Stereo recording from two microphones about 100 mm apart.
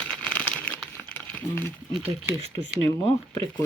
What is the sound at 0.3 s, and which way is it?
Crumpling, 15° left (ahead or behind).